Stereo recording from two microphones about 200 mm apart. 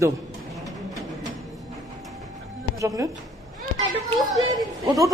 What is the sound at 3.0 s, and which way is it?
Speech, 15° right (ahead or behind).